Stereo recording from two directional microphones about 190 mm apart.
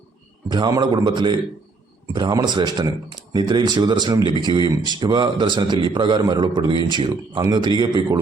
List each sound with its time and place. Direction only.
0.4 s speech: 25° right (ahead or behind)